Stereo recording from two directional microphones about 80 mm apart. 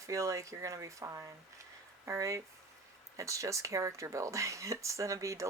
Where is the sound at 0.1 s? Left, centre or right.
Right.